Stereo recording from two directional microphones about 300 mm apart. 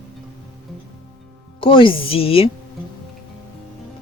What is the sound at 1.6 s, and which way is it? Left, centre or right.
Speech, centre.